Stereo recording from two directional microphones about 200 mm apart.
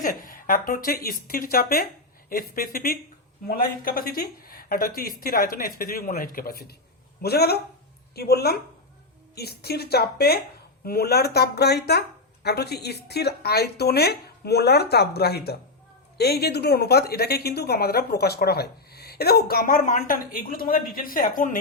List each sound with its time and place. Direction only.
0.0 s speech: 45° left (ahead or behind)